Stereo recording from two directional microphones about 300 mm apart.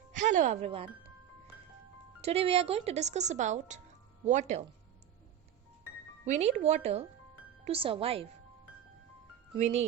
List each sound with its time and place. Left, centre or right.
0.1 s speech: right
2.2 s speech: centre
6.2 s speech: right
9.6 s speech: right